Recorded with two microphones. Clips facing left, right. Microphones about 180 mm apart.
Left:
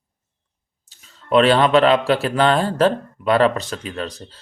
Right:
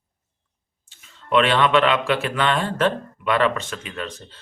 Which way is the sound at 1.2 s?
35° left (ahead or behind).